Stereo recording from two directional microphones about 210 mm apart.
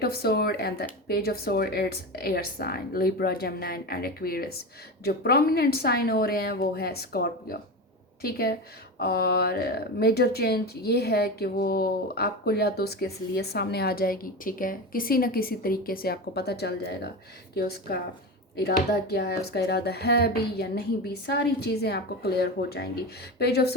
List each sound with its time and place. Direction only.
0.0 s speech: 45° left (ahead or behind)